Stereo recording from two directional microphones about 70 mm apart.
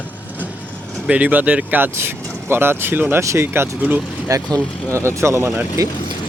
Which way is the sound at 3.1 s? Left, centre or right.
Right.